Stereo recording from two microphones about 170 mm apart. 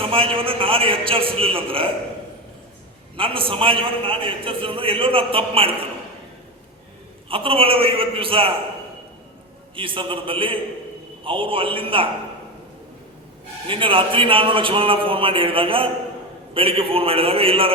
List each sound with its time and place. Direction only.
0.0 s a man's voice: 35° right (ahead or behind)
3.2 s a man's voice: 30° right (ahead or behind)
7.3 s a man's voice: 30° right (ahead or behind)
9.7 s a man's voice: 30° right (ahead or behind)
13.7 s a man's voice: 30° right (ahead or behind)